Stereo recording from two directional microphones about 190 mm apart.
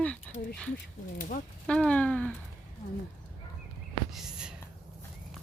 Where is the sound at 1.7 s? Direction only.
5° left (ahead or behind).